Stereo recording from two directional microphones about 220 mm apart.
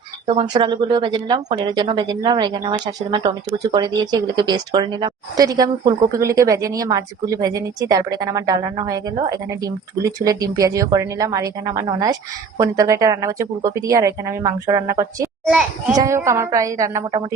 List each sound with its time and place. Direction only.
0.3 s a woman's voice: 20° right (ahead or behind)